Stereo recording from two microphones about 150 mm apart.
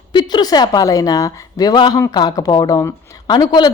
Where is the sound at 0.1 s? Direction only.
30° left (ahead or behind).